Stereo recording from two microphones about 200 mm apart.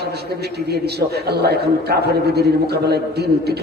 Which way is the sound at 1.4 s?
55° right (ahead or behind).